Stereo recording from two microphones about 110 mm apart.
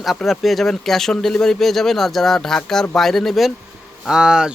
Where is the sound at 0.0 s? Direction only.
Centre (ahead or behind).